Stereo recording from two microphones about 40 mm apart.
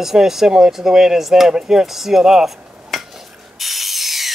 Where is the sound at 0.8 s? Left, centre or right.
Centre.